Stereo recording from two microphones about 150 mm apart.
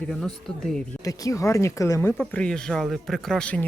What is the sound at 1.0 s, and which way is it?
Speech, 20° left (ahead or behind).